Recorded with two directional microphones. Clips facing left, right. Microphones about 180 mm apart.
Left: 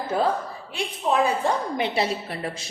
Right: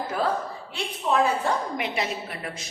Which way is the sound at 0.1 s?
25° left (ahead or behind).